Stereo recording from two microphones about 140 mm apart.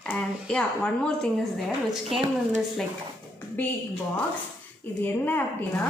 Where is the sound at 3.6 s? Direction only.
15° left (ahead or behind).